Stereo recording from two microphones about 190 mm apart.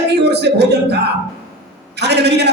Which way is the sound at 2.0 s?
60° right (ahead or behind).